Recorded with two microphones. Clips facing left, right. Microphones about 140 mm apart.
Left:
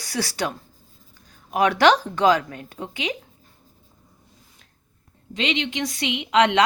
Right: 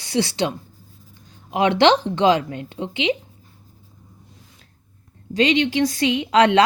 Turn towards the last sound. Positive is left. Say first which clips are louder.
# right 3 dB
turn(degrees=-35)  # may be behind; listen again after turning